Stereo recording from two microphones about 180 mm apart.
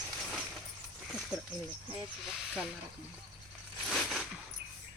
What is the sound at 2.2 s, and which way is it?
Speech, centre (ahead or behind).